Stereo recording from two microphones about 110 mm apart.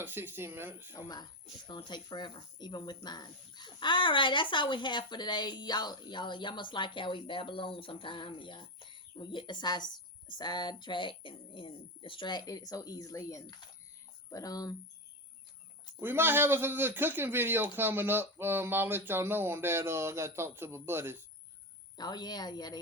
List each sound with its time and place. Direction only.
0.0 s speech: 20° right (ahead or behind)
0.9 s a woman's voice: 40° left (ahead or behind)
16.0 s speech: 20° right (ahead or behind)
21.9 s a woman's voice: 40° left (ahead or behind)